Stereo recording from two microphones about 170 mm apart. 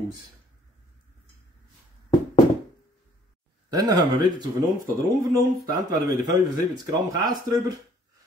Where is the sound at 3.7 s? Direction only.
25° right (ahead or behind).